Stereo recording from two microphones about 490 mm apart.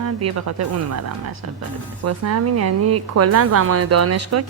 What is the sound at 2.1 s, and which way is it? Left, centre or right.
A woman's voice, right.